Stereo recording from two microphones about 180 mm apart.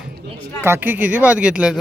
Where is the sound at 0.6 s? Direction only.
10° right (ahead or behind).